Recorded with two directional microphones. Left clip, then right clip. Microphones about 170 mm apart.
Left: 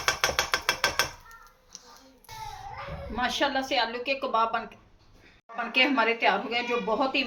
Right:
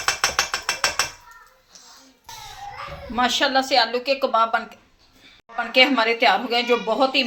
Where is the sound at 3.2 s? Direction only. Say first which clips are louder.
Right 8 dB; 30° right (ahead or behind).